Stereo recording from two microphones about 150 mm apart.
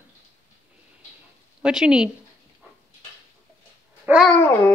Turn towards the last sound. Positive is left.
turn(degrees=15)  # may be behind; listen again after turning